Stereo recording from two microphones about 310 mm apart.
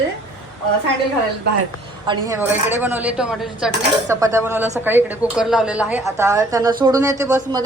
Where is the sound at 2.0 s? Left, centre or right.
Centre.